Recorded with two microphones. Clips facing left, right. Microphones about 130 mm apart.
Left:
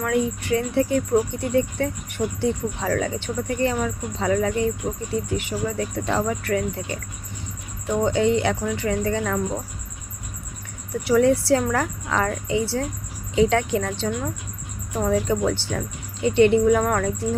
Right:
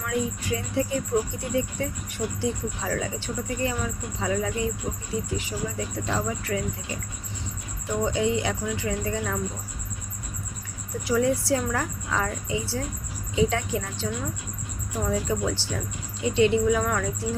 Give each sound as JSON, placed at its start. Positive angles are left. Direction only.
{"t": 0.0, "sound": "speech", "side_deg": 60}
{"t": 8.0, "sound": "speech", "side_deg": 65}
{"t": 11.0, "sound": "a woman's voice", "side_deg": 65}